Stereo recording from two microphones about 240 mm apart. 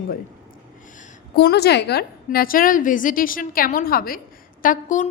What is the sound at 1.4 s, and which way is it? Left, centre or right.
A woman's voice, left.